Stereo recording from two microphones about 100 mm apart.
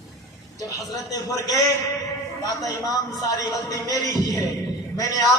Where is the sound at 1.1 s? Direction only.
35° left (ahead or behind).